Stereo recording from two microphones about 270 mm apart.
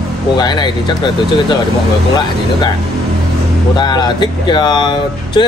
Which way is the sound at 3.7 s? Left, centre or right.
Centre.